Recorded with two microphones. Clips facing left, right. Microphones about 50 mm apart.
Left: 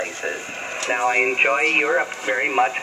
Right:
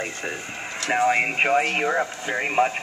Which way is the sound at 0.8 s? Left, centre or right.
Centre.